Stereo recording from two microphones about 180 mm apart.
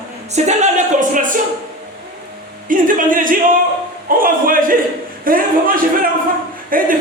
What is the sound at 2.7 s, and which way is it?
Music, 50° right (ahead or behind).